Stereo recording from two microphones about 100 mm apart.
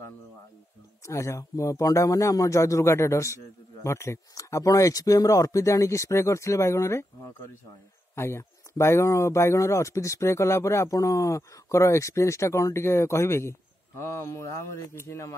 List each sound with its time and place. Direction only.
1.0 s speech: 30° left (ahead or behind)
8.2 s speech: 25° left (ahead or behind)